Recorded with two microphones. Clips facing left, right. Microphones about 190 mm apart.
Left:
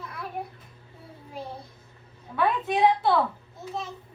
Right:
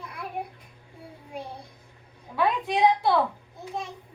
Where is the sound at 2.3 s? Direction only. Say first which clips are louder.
Even; 15° right (ahead or behind).